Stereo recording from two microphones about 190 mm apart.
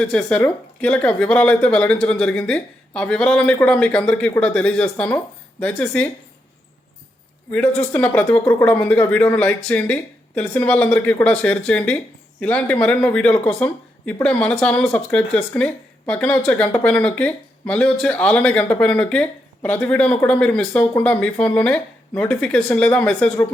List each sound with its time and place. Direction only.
0.0 s speech: 5° left (ahead or behind)
7.5 s speech: 5° left (ahead or behind)